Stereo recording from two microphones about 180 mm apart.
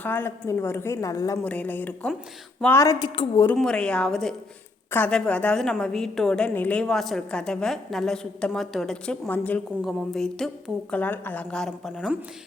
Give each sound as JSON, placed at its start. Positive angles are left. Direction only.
{"t": 0.0, "sound": "a woman's voice", "side_deg": 10}
{"t": 3.4, "sound": "a woman's voice", "side_deg": 5}